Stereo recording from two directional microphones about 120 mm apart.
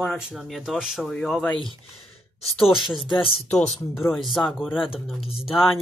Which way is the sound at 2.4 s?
50° left (ahead or behind).